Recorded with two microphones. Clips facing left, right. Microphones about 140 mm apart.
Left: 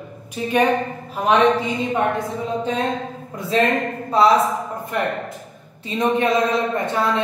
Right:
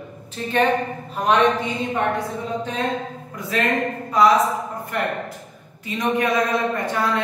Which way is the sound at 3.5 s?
30° left (ahead or behind).